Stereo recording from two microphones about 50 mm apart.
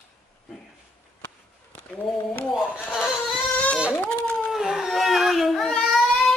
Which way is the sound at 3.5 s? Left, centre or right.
Left.